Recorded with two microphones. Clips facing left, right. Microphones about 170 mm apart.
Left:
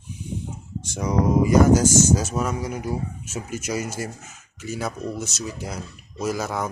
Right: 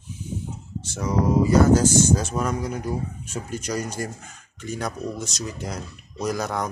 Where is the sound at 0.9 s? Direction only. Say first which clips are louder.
Left 1 dB; 15° left (ahead or behind).